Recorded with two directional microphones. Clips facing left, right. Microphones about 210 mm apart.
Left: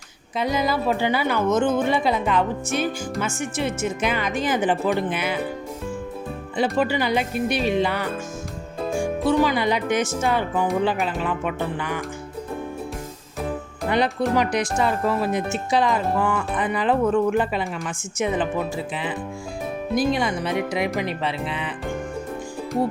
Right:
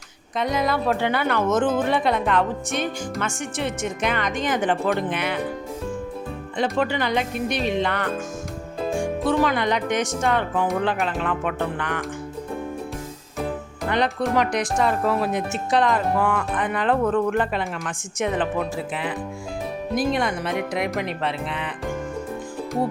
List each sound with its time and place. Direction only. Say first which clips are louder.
0.3 s speech: even; centre (ahead or behind)
6.6 s speech: left 1 dB; 5° left (ahead or behind)
13.9 s speech: left 1 dB; 5° left (ahead or behind)